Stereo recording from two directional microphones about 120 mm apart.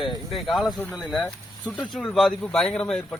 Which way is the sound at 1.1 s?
10° left (ahead or behind).